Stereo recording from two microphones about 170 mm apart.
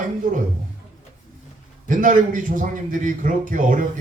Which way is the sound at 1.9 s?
50° right (ahead or behind).